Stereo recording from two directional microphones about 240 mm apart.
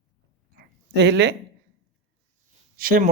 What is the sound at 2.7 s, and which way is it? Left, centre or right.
Speech, right.